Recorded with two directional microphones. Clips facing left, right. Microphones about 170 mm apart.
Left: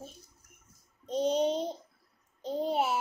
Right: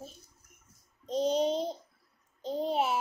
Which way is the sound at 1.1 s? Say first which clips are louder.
Even; 5° left (ahead or behind).